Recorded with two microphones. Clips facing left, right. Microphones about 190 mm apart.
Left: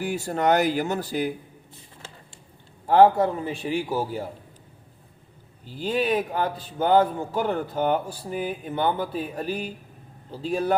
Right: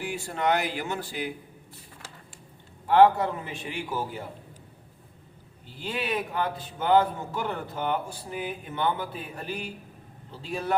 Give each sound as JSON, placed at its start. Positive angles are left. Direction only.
{"t": 0.0, "sound": "a man's voice", "side_deg": 40}
{"t": 2.8, "sound": "a man's voice", "side_deg": 40}
{"t": 5.8, "sound": "a man's voice", "side_deg": 35}